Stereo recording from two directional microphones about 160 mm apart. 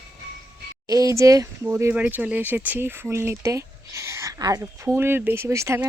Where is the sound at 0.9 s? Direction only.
20° right (ahead or behind).